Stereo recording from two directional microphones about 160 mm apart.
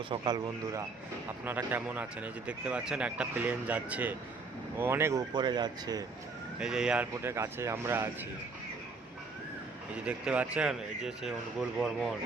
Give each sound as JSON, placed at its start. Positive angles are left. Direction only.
{"t": 0.1, "sound": "speech", "side_deg": -25}
{"t": 1.5, "sound": "speech", "side_deg": -10}
{"t": 5.3, "sound": "speech", "side_deg": -25}
{"t": 6.6, "sound": "speech", "side_deg": -5}
{"t": 10.1, "sound": "speech", "side_deg": -10}